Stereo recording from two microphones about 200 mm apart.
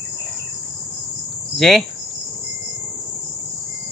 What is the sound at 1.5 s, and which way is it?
Cricket, centre (ahead or behind).